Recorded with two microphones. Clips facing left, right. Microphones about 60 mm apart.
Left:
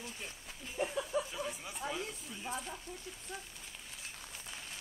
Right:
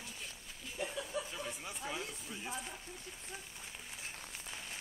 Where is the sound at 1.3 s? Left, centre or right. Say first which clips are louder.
Left 2 dB; centre.